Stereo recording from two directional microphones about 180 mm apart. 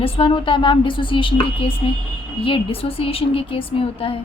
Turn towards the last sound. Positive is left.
turn(degrees=30)  # may be behind; listen again after turning